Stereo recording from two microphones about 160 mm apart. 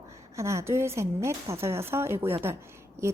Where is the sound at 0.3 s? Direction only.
20° right (ahead or behind).